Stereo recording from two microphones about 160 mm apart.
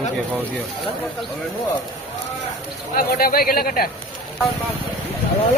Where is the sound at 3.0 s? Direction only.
70° left (ahead or behind).